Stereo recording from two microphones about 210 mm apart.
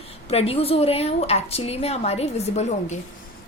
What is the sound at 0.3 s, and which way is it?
Speech, 30° left (ahead or behind).